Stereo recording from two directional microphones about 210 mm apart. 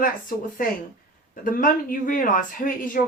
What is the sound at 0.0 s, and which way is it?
Speech, 40° left (ahead or behind).